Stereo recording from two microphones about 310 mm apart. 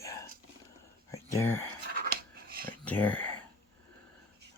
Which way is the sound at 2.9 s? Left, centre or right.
Centre.